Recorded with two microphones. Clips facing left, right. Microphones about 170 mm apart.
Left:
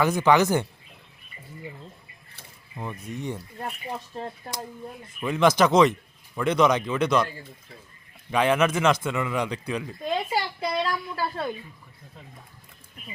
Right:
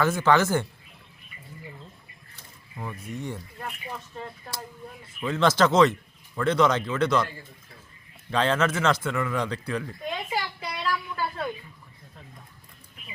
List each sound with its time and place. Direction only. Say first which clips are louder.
0.0 s a man's voice: left 2 dB; 15° left (ahead or behind)
2.7 s speech: left 1 dB; 20° left (ahead or behind)
4.1 s speech: left 4 dB; 35° left (ahead or behind)
5.0 s a man's voice: left 2 dB; 15° left (ahead or behind)
8.3 s a man's voice: left 2 dB; 15° left (ahead or behind)
10.0 s a sound: left 4 dB; 35° left (ahead or behind)